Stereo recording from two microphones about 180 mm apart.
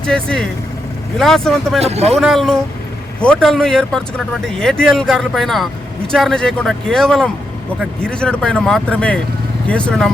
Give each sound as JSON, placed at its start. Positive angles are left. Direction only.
{"t": 0.0, "sound": "speech", "side_deg": 5}
{"t": 1.8, "sound": "speech", "side_deg": -35}
{"t": 2.1, "sound": "speech", "side_deg": 0}